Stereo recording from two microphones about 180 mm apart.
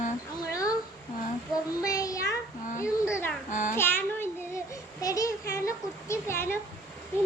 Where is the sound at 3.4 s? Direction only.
45° left (ahead or behind).